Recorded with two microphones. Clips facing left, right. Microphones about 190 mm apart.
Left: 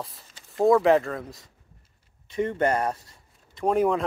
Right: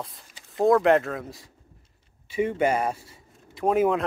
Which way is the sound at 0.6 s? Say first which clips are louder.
Even; centre (ahead or behind).